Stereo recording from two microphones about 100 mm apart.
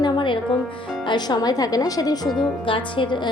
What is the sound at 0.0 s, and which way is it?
Music, 55° left (ahead or behind).